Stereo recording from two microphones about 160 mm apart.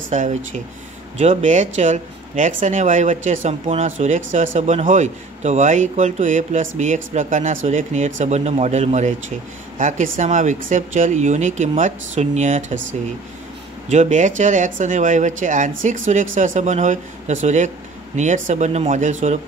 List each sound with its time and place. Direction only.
0.1 s speech: 50° right (ahead or behind)
13.8 s speech: 45° right (ahead or behind)